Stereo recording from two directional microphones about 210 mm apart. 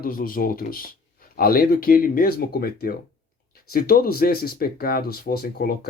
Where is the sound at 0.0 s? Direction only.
45° left (ahead or behind).